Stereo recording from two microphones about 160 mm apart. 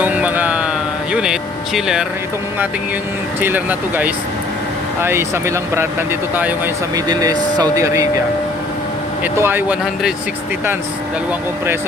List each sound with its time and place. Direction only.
0.0 s music: 10° right (ahead or behind)
1.1 s speech: 5° right (ahead or behind)
3.4 s speech: 10° right (ahead or behind)
6.9 s speech: 25° right (ahead or behind)
9.2 s speech: 15° right (ahead or behind)
11.3 s speech: 15° right (ahead or behind)